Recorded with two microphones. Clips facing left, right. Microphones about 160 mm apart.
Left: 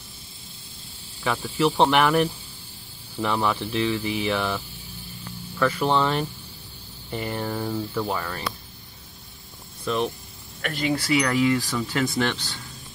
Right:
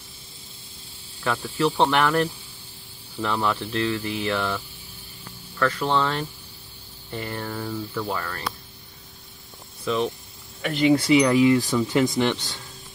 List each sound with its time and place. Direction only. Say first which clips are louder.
1.2 s speech: left 1 dB; 5° left (ahead or behind)
5.6 s speech: left 1 dB; 15° left (ahead or behind)
9.8 s speech: right 1 dB; 5° left (ahead or behind)
10.6 s speech: right 6 dB; 15° right (ahead or behind)